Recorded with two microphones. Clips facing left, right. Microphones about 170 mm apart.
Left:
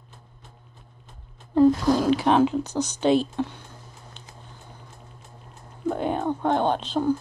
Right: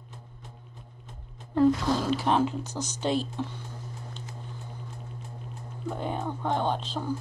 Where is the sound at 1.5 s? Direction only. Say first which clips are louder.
Left 5 dB; 15° left (ahead or behind).